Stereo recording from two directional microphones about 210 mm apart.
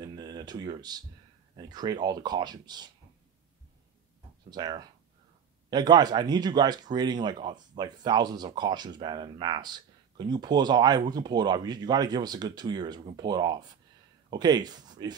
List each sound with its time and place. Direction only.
0.0 s a sound: 20° right (ahead or behind)
1.6 s speech: 20° right (ahead or behind)
4.5 s speech: 20° right (ahead or behind)